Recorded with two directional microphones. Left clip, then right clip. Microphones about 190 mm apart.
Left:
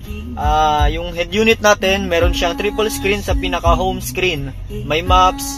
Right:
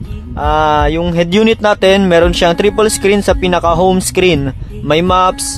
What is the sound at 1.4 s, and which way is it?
Speech, 40° right (ahead or behind).